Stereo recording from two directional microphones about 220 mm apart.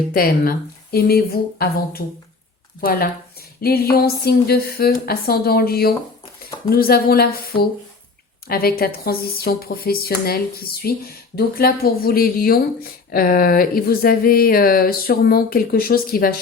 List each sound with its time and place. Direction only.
0.1 s speech: 40° left (ahead or behind)